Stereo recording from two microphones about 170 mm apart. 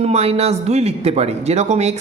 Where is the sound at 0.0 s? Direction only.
40° right (ahead or behind).